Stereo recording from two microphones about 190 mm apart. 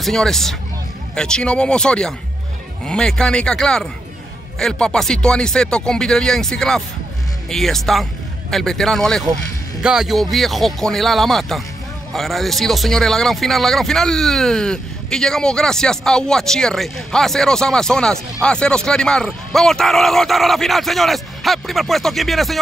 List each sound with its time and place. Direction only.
0.0 s speech: centre (ahead or behind)